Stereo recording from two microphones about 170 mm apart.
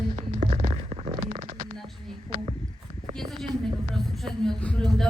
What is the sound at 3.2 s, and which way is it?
A man's voice, centre (ahead or behind).